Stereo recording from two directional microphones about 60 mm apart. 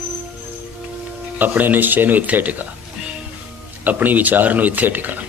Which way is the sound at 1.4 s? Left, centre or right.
Right.